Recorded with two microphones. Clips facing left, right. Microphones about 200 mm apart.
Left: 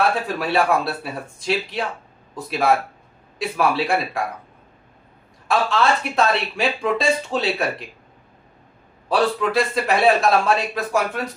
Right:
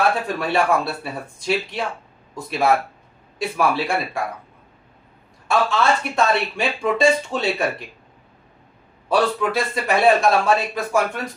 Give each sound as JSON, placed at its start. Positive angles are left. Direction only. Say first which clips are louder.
{"t": 0.3, "sound": "speech", "louder": "even", "side_deg": 0}
{"t": 5.5, "sound": "speech", "louder": "even", "side_deg": 0}
{"t": 9.0, "sound": "speech", "louder": "even", "side_deg": 0}